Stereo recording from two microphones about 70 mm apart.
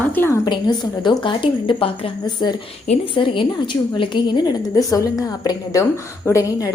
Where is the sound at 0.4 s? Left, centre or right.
Left.